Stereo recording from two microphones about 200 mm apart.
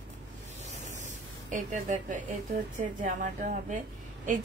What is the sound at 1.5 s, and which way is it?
A woman's voice, 40° right (ahead or behind).